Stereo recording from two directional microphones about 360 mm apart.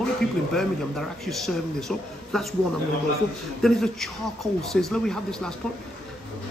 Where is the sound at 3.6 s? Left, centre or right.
Centre.